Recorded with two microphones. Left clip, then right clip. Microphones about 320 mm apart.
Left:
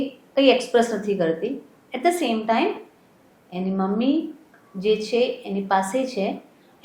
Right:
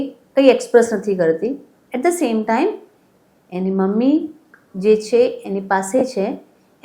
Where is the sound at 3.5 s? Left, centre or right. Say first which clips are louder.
Right 6 dB; right.